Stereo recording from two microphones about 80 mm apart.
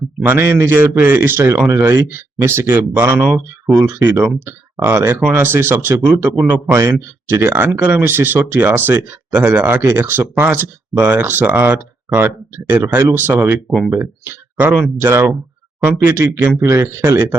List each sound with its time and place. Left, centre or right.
0.2 s speech: right
13.7 s speech: centre
13.9 s speech: right